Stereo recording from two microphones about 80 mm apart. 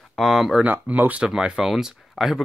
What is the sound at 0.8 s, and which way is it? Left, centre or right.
Speech, centre.